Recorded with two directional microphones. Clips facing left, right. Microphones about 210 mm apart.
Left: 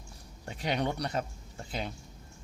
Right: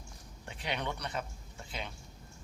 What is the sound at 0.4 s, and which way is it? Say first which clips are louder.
Speech: left 6 dB; 40° left (ahead or behind).